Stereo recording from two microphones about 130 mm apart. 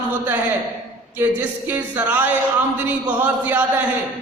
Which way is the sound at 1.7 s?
15° right (ahead or behind).